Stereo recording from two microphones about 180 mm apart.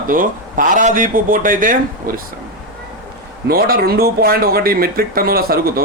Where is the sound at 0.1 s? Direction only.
50° right (ahead or behind).